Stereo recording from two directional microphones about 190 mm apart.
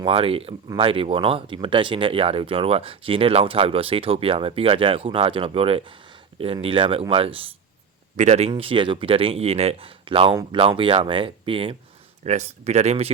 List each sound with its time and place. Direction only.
0.0 s speech: 30° right (ahead or behind)